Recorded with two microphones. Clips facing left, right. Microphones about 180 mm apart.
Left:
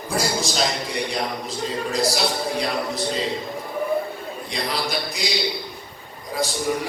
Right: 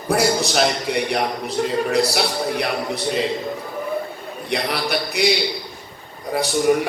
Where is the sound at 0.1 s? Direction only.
65° right (ahead or behind).